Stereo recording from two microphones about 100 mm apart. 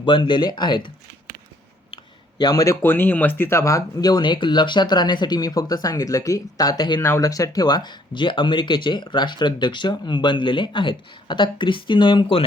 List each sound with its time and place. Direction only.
0.0 s speech: 50° left (ahead or behind)
2.4 s speech: 35° left (ahead or behind)
2.8 s speech: 20° left (ahead or behind); by 12.5 s 60° left (ahead or behind)